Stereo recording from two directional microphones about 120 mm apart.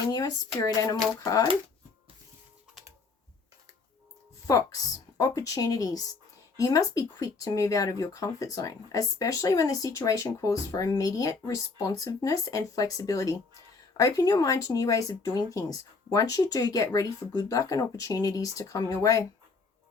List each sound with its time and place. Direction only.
0.1 s speech: 35° left (ahead or behind)
5.1 s speech: 30° left (ahead or behind)